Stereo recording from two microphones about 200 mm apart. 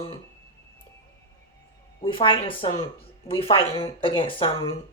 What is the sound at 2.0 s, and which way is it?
Speech, 25° left (ahead or behind).